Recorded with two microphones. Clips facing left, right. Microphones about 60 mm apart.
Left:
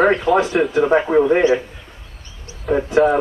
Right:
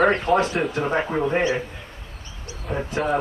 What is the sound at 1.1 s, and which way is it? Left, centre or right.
Speech, left.